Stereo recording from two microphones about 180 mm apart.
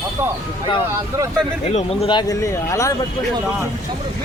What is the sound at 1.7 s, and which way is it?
Speech, 35° left (ahead or behind).